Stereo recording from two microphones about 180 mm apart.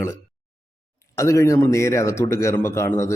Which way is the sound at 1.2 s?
15° left (ahead or behind).